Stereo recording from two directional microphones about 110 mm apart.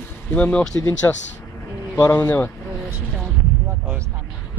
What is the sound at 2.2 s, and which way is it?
Speech, 20° left (ahead or behind).